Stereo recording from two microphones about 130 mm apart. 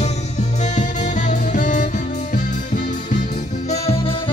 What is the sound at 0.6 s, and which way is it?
Music, 70° left (ahead or behind).